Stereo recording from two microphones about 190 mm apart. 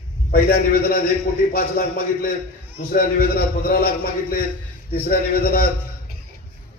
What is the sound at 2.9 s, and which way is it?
A man's voice, 50° left (ahead or behind).